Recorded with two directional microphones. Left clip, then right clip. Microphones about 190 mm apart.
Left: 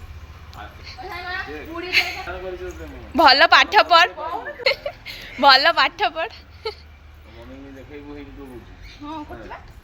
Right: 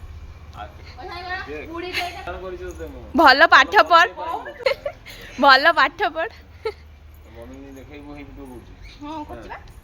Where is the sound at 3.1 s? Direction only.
45° right (ahead or behind).